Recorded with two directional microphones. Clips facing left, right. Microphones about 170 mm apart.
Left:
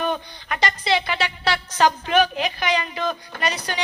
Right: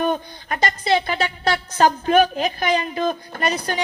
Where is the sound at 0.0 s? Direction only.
40° right (ahead or behind).